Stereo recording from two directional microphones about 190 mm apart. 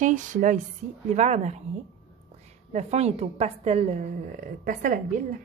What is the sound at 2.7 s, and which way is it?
A woman's voice, 35° right (ahead or behind).